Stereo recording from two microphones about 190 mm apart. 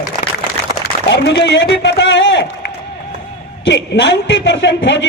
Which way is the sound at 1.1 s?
65° left (ahead or behind).